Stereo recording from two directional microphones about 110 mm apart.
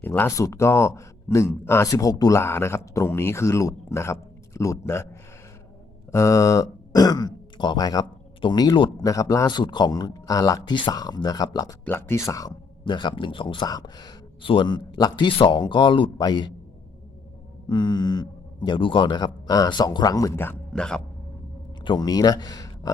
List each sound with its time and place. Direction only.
0.0 s speech: 20° left (ahead or behind)
2.4 s speech: 20° left (ahead or behind)
6.1 s speech: 30° left (ahead or behind)
9.0 s speech: 35° left (ahead or behind)
11.9 s speech: 20° left (ahead or behind)
12.8 s a man's voice: 45° left (ahead or behind)
14.5 s speech: 50° left (ahead or behind)
17.7 s speech: 40° left (ahead or behind)
20.7 s speech: 5° left (ahead or behind)
21.8 s speech: 40° left (ahead or behind)